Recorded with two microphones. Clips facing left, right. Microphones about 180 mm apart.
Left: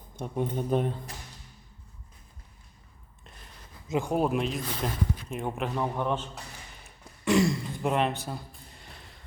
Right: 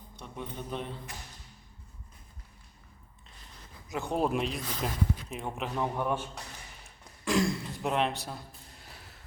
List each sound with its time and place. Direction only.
0.2 s speech: 50° left (ahead or behind)
3.8 s speech: 20° left (ahead or behind)
4.1 s a man's voice: 5° left (ahead or behind)
6.8 s throat clearing: centre (ahead or behind)
8.3 s a sound: centre (ahead or behind)